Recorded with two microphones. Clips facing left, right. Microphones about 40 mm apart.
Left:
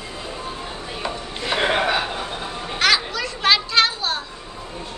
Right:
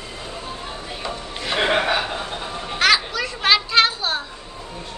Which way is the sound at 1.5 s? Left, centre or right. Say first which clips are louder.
Right 1 dB; centre.